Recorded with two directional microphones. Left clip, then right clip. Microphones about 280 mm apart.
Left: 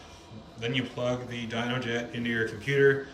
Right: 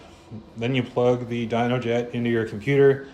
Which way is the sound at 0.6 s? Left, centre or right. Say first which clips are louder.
Right 8 dB; centre.